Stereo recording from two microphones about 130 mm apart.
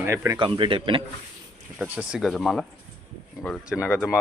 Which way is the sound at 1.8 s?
10° right (ahead or behind).